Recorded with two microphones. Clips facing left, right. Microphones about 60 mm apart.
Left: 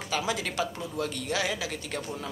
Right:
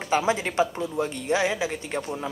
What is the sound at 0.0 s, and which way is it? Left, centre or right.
Speech, right.